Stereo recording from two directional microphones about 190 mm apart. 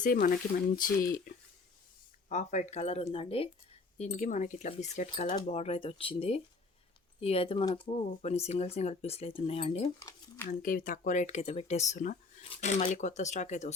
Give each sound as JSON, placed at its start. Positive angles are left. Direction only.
{"t": 0.0, "sound": "speech", "side_deg": 50}
{"t": 10.0, "sound": "speech", "side_deg": 15}
{"t": 10.6, "sound": "speech", "side_deg": 45}